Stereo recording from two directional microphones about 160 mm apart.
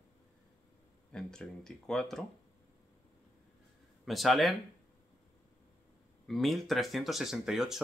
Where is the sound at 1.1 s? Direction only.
5° left (ahead or behind).